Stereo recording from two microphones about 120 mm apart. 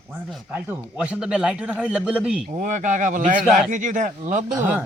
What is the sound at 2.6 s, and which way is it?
Speech, 90° right.